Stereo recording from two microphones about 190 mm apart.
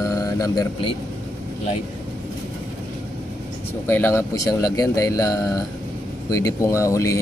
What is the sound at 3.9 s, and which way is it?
Speech, 10° left (ahead or behind).